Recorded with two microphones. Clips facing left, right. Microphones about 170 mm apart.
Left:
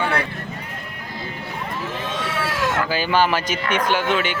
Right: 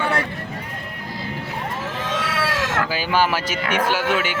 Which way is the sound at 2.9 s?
10° right (ahead or behind).